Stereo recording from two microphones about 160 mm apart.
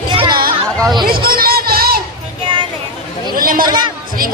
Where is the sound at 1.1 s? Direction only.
70° right (ahead or behind).